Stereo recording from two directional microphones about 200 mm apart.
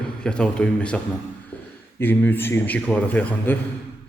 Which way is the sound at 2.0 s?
10° left (ahead or behind).